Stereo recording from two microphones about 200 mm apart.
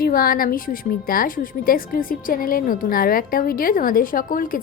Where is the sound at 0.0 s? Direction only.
45° left (ahead or behind).